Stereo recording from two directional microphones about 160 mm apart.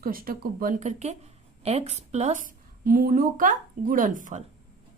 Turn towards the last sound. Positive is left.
turn(degrees=-55)  # may be behind; listen again after turning